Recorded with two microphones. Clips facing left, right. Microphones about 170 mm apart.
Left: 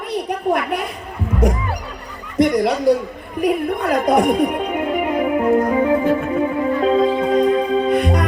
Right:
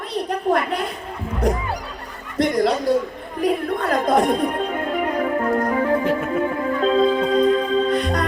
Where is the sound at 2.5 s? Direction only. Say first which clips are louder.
Left 1 dB; 20° left (ahead or behind).